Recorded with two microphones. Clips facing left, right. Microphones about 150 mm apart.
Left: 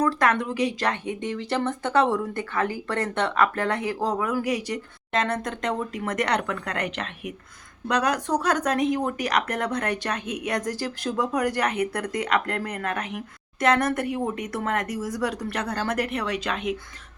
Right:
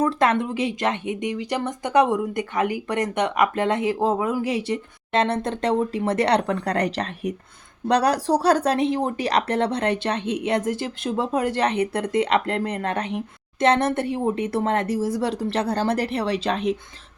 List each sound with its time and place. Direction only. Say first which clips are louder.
0.0 s speech: right 2 dB; 25° right (ahead or behind)